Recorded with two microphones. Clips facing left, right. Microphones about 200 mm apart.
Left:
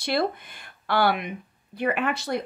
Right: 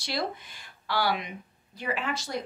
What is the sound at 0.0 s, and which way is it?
Speech, 55° left (ahead or behind).